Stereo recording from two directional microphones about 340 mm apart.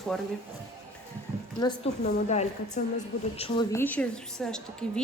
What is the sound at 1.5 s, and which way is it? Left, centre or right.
A woman's voice, centre.